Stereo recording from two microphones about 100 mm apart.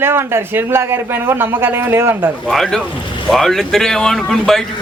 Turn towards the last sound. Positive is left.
turn(degrees=5)  # may be behind; listen again after turning